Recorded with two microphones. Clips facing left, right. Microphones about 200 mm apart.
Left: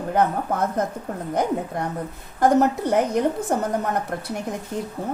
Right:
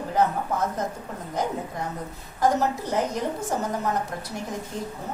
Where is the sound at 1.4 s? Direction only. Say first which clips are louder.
Left 4 dB; 55° left (ahead or behind).